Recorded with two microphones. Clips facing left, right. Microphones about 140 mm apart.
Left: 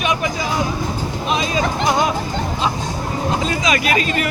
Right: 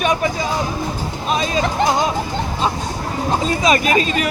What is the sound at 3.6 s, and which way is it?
Speech, 30° right (ahead or behind).